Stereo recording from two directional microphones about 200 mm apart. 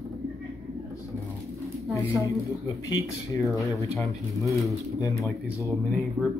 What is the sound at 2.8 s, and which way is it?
Speech, 15° left (ahead or behind).